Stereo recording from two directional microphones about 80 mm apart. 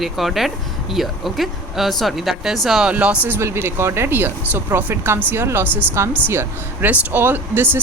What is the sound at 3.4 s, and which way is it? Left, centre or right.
Speech, right.